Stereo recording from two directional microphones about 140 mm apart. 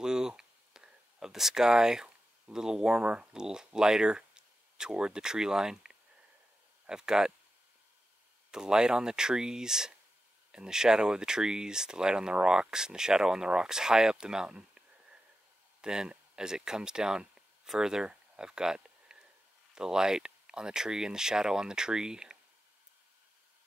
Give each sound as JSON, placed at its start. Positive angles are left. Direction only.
{"t": 0.0, "sound": "a sound", "side_deg": -5}
{"t": 6.9, "sound": "speech", "side_deg": -5}
{"t": 8.5, "sound": "speech", "side_deg": -5}
{"t": 15.8, "sound": "speech", "side_deg": -5}